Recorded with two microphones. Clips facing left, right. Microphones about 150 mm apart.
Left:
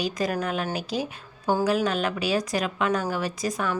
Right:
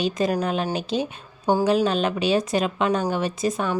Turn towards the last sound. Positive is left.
turn(degrees=-25)  # may be behind; listen again after turning